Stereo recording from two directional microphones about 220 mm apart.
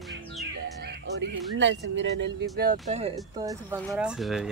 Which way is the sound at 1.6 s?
55° right (ahead or behind).